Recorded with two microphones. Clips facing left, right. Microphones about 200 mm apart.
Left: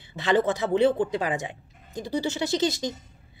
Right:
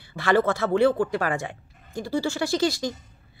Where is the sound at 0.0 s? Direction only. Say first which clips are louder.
Right 1 dB; 20° left (ahead or behind).